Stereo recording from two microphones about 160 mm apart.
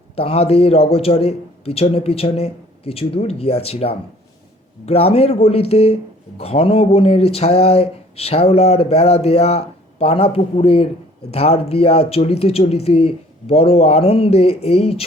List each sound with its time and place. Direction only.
0.2 s speech: 40° left (ahead or behind)